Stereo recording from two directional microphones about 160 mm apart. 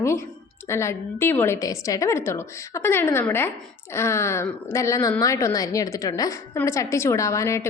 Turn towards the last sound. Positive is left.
turn(degrees=20)  # may be behind; listen again after turning